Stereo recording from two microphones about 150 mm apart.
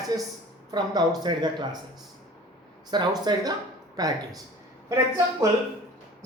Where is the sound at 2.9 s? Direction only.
25° right (ahead or behind).